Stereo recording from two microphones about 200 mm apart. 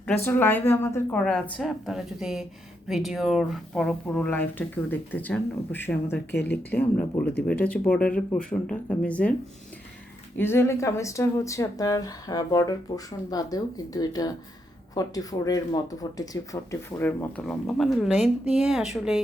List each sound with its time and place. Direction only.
0.0 s speech: 10° left (ahead or behind)
10.3 s speech: 10° left (ahead or behind)